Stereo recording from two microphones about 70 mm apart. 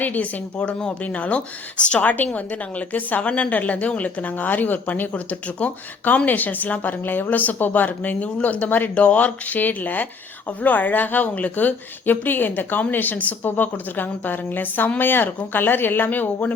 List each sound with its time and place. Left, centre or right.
0.0 s speech: left